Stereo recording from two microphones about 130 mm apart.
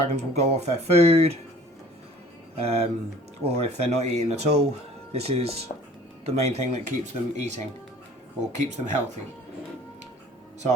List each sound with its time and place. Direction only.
0.1 s speech: 55° right (ahead or behind)
2.6 s speech: 55° right (ahead or behind)